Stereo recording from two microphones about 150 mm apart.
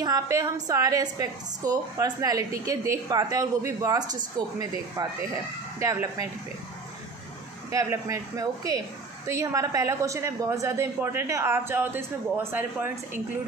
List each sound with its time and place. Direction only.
0.0 s speech: 25° right (ahead or behind)
7.7 s speech: 20° right (ahead or behind)